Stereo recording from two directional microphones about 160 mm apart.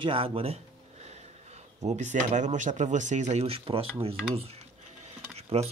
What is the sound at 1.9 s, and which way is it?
Speech, 50° right (ahead or behind).